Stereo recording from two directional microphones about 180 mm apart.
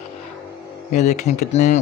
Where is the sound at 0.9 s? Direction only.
40° left (ahead or behind).